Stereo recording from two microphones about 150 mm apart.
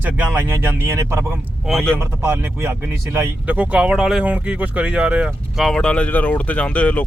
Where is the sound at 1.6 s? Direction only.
Centre (ahead or behind).